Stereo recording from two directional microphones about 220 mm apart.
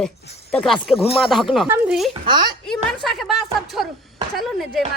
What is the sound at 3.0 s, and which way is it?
Speech, centre (ahead or behind).